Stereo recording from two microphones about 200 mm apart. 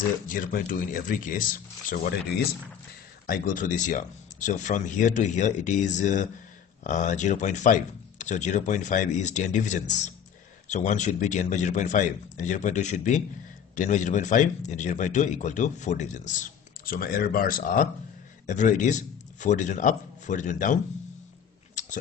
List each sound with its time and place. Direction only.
0.3 s speech: 45° left (ahead or behind)
3.3 s speech: 45° left (ahead or behind)